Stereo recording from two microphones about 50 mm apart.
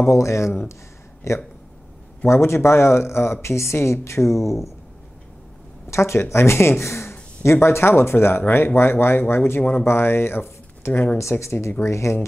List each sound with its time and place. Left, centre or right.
0.1 s speech: left
5.9 s speech: left
6.8 s a sound: left
7.6 s speech: left
11.1 s speech: left